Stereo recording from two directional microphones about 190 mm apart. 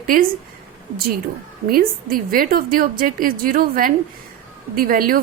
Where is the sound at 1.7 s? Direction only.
50° right (ahead or behind).